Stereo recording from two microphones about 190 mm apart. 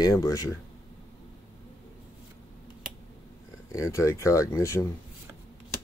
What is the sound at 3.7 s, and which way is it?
Speech, 15° left (ahead or behind).